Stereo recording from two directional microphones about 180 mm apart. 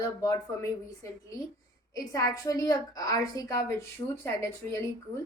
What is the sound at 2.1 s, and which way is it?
A woman's voice, 20° left (ahead or behind).